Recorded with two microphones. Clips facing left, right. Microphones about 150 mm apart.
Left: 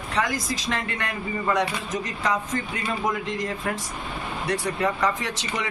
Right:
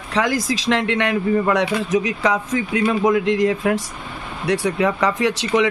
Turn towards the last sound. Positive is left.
turn(degrees=-70)  # may be behind; listen again after turning